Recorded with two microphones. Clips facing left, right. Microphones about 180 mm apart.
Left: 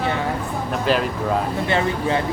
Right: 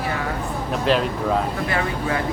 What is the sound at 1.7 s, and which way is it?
Speech, 25° left (ahead or behind).